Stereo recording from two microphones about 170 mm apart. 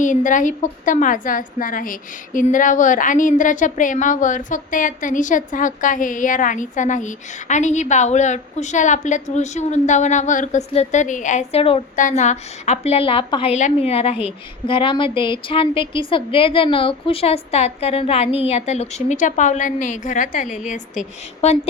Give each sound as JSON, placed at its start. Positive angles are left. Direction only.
{"t": 0.0, "sound": "a woman's voice", "side_deg": 50}
{"t": 11.9, "sound": "a woman's voice", "side_deg": 45}